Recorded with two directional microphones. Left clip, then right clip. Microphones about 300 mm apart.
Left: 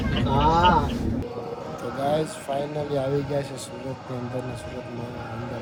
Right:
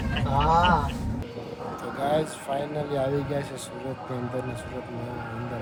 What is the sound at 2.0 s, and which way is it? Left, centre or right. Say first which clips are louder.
Speech: left 1 dB; centre.